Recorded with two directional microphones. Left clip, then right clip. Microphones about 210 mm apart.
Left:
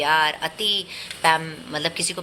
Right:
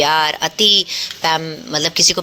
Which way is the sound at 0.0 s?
45° right (ahead or behind).